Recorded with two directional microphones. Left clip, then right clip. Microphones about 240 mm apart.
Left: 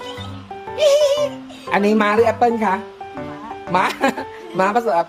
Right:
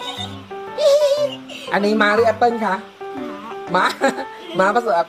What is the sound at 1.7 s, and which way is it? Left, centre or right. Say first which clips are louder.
Speech: even; left.